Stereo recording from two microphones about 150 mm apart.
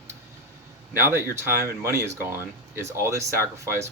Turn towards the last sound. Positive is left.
turn(degrees=-20)  # may be behind; listen again after turning